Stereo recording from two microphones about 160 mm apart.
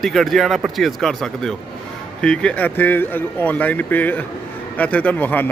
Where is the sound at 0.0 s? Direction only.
Centre (ahead or behind).